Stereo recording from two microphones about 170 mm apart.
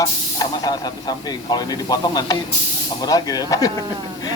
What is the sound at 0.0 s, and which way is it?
Speech, 20° left (ahead or behind).